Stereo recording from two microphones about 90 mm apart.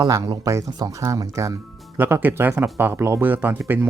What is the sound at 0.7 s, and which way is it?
Speech, 45° right (ahead or behind).